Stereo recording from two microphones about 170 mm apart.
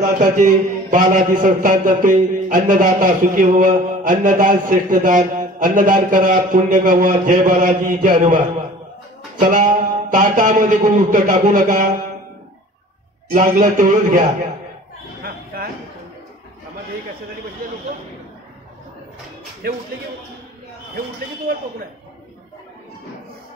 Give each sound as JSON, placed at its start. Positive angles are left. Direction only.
{"t": 0.0, "sound": "a man's voice", "side_deg": -50}
{"t": 13.3, "sound": "a man's voice", "side_deg": -50}
{"t": 15.2, "sound": "a sound", "side_deg": -60}
{"t": 19.6, "sound": "speech", "side_deg": -65}